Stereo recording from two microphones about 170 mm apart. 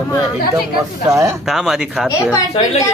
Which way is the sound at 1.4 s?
Centre (ahead or behind).